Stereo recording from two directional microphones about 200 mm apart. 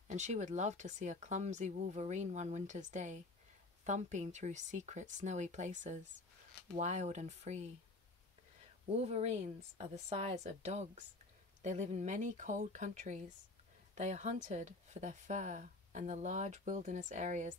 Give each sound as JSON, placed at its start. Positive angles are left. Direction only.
{"t": 0.1, "sound": "speech", "side_deg": -35}
{"t": 8.9, "sound": "speech", "side_deg": -30}